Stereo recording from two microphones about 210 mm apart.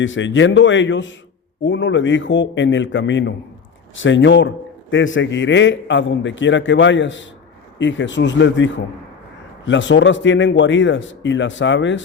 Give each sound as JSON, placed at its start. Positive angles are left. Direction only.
{"t": 0.0, "sound": "a man's voice", "side_deg": 60}